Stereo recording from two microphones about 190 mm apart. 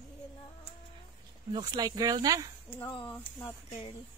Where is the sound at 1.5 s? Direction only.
20° right (ahead or behind).